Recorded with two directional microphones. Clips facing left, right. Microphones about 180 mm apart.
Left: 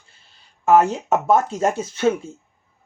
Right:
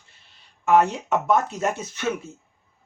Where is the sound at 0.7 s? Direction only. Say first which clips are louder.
Left 3 dB; 35° left (ahead or behind).